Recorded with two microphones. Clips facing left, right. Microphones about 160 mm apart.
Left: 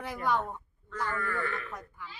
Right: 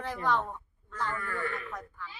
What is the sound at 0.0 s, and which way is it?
Speech, 10° left (ahead or behind).